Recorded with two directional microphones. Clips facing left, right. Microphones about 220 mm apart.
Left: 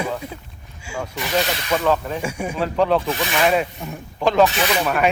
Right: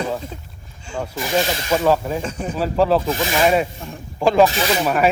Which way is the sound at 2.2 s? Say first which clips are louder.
Even; 10° left (ahead or behind).